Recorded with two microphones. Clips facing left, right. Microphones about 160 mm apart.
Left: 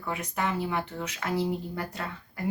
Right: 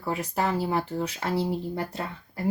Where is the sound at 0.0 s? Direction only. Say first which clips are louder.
Right 4 dB; 35° right (ahead or behind).